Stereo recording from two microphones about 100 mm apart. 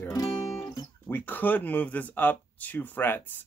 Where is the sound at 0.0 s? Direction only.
30° left (ahead or behind).